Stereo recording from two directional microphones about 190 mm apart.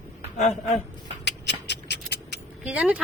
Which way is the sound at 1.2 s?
65° left (ahead or behind).